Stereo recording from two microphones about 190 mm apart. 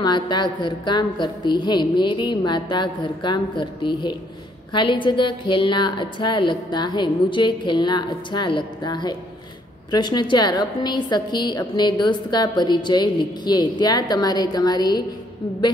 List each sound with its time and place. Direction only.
0.0 s a woman's voice: 25° left (ahead or behind)